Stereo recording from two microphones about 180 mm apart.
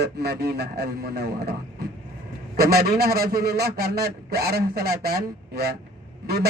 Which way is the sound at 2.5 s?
60° right (ahead or behind).